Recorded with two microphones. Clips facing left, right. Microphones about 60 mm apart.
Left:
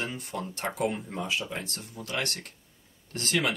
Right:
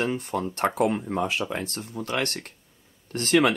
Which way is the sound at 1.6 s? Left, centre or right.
Right.